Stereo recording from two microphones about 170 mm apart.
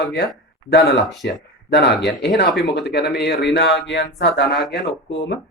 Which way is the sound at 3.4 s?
90° left.